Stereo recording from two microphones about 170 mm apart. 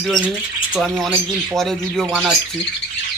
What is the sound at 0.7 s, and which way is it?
Speech, 5° right (ahead or behind).